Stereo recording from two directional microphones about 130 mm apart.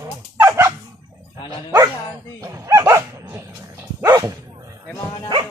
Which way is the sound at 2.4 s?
25° right (ahead or behind).